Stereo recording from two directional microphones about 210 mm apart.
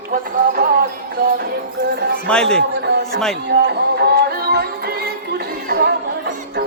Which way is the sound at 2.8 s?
50° right (ahead or behind).